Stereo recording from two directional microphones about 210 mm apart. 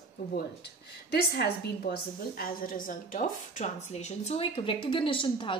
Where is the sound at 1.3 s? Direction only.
50° left (ahead or behind).